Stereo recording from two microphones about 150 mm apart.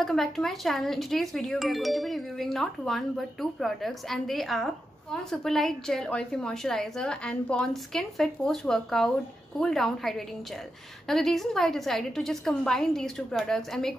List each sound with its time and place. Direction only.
0.0 s speech: centre (ahead or behind)